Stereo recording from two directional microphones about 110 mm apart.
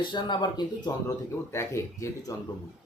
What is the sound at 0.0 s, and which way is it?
Speech, 45° left (ahead or behind).